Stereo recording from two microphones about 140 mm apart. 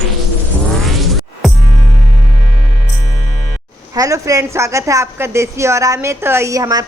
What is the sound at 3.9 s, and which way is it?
A woman's voice, 20° right (ahead or behind).